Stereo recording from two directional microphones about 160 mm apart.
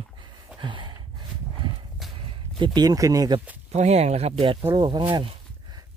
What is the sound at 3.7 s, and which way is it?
Speech, 45° right (ahead or behind).